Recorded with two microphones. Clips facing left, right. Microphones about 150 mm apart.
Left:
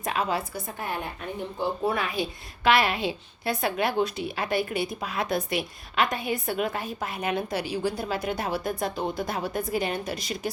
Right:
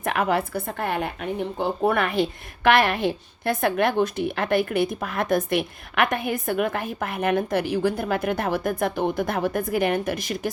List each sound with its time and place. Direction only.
0.0 s a woman's voice: 60° right (ahead or behind)